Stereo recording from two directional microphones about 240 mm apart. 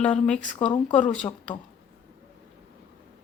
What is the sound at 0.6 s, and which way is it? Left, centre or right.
Speech, left.